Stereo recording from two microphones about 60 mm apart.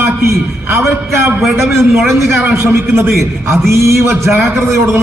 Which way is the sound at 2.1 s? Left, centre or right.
Right.